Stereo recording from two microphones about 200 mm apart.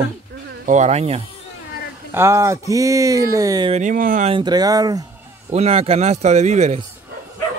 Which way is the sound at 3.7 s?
40° right (ahead or behind).